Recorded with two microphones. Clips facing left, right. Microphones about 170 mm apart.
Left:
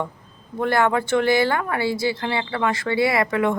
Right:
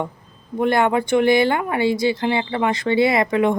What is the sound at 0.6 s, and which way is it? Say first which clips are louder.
Speech: right 2 dB; 20° right (ahead or behind).